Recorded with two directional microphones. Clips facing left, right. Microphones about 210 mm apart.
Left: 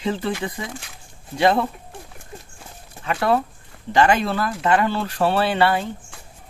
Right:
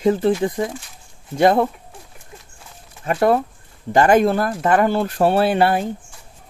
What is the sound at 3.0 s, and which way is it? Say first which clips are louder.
Speech: right 4 dB; 45° right (ahead or behind).